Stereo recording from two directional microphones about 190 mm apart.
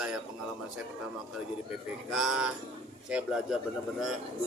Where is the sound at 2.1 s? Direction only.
Centre (ahead or behind).